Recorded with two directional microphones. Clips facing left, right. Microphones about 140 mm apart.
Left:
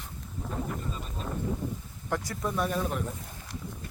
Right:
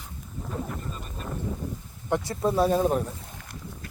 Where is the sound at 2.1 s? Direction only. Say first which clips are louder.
Right 6 dB; 25° right (ahead or behind).